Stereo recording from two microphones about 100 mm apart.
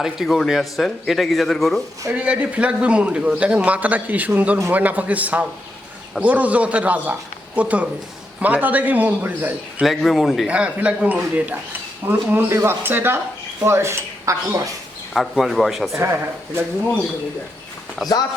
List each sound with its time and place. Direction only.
0.0 s a man's voice: centre (ahead or behind)
2.1 s a man's voice: 10° right (ahead or behind)
9.8 s a man's voice: centre (ahead or behind)
10.4 s a man's voice: 10° right (ahead or behind); by 14.7 s 30° right (ahead or behind)
15.1 s a man's voice: centre (ahead or behind)